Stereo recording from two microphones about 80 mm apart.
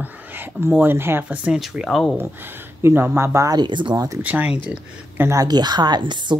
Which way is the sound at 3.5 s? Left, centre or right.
Right.